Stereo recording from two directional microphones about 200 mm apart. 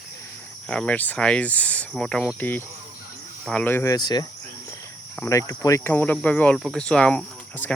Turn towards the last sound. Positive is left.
turn(degrees=5)  # may be behind; listen again after turning